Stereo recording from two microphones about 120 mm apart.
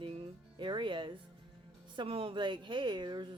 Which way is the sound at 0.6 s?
40° right (ahead or behind).